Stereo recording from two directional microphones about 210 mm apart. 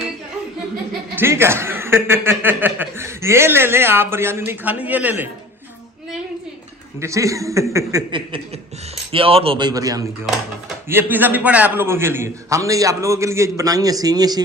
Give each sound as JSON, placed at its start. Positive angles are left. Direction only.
{"t": 1.1, "sound": "a man's voice", "side_deg": -10}
{"t": 7.0, "sound": "a man's voice", "side_deg": -15}